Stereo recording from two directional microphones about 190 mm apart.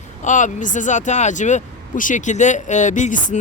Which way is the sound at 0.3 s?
40° left (ahead or behind).